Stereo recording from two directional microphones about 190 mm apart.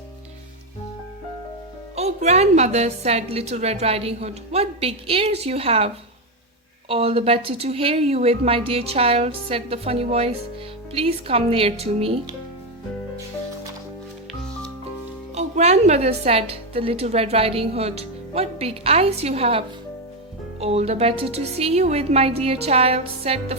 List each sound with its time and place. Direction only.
2.0 s a woman's voice: 35° right (ahead or behind)
15.4 s a woman's voice: 35° right (ahead or behind)